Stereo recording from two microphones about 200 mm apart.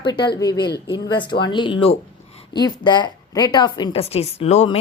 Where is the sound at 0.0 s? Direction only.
25° left (ahead or behind).